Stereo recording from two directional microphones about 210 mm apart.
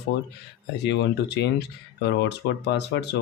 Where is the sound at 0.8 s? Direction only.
55° left (ahead or behind).